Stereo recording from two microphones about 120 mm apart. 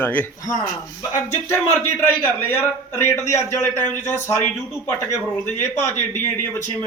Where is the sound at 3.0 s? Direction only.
20° left (ahead or behind).